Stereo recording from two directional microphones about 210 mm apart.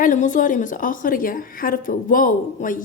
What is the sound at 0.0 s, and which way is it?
A woman's voice, 35° left (ahead or behind).